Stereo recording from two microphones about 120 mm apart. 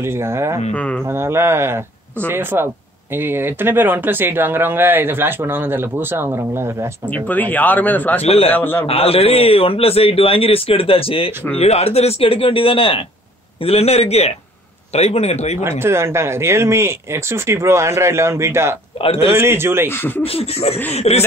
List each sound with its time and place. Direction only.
0.0 s speech: 20° right (ahead or behind)
0.7 s speech: 10° left (ahead or behind)
1.0 s speech: 20° right (ahead or behind)
7.1 s speech: 15° left (ahead or behind)
8.2 s a man's voice: 60° left (ahead or behind)
8.5 s speech: 15° left (ahead or behind)
8.8 s a man's voice: 55° left (ahead or behind)
15.8 s speech: 20° right (ahead or behind)
19.9 s speech: 15° left (ahead or behind)
20.2 s a man's voice: 55° left (ahead or behind)